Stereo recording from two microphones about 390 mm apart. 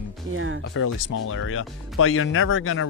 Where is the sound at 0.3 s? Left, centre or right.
Right.